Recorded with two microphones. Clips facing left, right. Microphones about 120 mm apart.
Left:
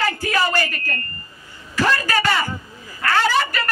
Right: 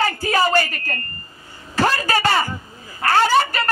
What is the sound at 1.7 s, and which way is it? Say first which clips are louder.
Speech: right 1 dB; 35° right (ahead or behind).